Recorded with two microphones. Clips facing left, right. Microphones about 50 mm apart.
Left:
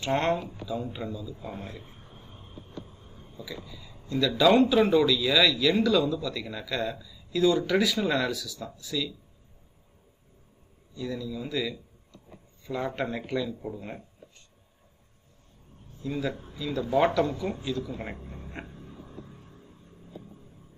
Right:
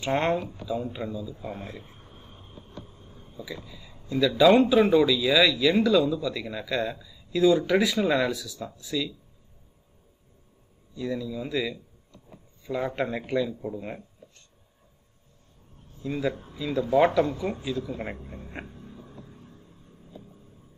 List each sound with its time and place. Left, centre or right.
0.0 s a man's voice: centre
3.3 s a man's voice: centre
11.0 s a man's voice: centre
16.0 s a man's voice: centre